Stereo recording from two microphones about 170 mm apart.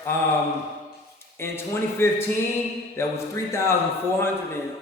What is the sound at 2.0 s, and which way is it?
A man's voice, 15° left (ahead or behind).